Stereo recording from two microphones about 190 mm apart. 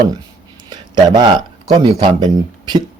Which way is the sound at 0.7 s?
20° right (ahead or behind).